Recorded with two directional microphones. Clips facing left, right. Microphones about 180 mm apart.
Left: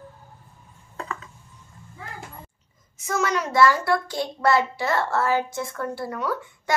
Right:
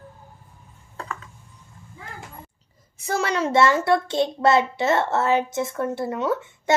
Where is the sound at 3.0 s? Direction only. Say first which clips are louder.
Right 2 dB; 30° right (ahead or behind).